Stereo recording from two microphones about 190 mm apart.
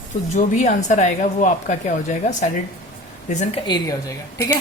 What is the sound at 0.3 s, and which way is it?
A woman's voice, 40° left (ahead or behind).